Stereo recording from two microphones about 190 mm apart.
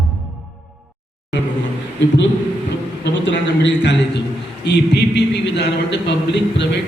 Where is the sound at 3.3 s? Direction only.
70° left (ahead or behind).